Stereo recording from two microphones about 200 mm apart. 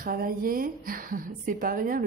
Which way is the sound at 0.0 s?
45° right (ahead or behind).